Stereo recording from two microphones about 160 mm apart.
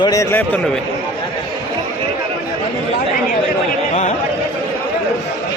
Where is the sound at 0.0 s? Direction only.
20° left (ahead or behind).